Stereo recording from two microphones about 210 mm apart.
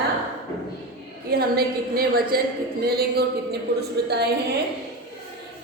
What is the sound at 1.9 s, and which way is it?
A woman's voice, 45° right (ahead or behind).